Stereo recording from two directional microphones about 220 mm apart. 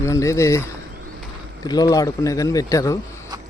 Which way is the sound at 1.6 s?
15° left (ahead or behind).